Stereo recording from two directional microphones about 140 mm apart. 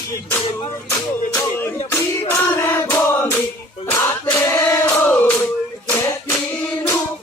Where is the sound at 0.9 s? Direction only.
15° left (ahead or behind).